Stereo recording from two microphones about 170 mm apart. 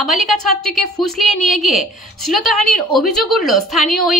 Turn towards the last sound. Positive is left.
turn(degrees=0)  # may be behind; listen again after turning